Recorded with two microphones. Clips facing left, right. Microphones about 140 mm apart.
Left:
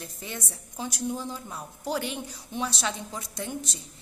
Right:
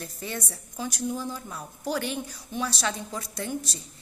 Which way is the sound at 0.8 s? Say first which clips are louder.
Right 1 dB; 25° left (ahead or behind).